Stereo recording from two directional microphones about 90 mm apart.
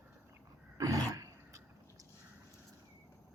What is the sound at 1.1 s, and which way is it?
Arrow, 40° right (ahead or behind).